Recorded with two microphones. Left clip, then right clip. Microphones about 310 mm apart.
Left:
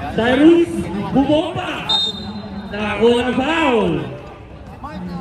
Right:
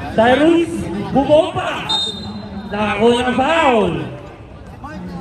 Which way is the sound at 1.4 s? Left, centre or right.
Right.